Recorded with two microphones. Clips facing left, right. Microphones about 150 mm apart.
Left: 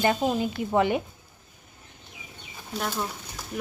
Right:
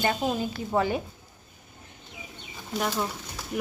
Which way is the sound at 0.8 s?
20° left (ahead or behind).